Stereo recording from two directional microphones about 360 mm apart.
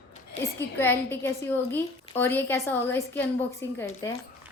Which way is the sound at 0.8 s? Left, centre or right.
Centre.